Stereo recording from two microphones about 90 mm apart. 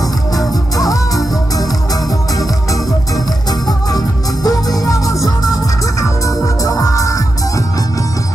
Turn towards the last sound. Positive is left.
turn(degrees=40)  # may be behind; listen again after turning